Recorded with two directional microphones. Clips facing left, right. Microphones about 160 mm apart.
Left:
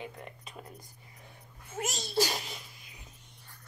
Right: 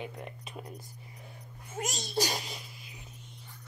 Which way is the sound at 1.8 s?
15° right (ahead or behind).